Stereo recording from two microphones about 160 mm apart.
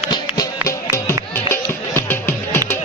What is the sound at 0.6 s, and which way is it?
Music, 20° left (ahead or behind).